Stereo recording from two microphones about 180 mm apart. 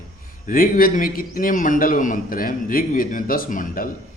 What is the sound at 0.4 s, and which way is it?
A man's voice, 50° left (ahead or behind).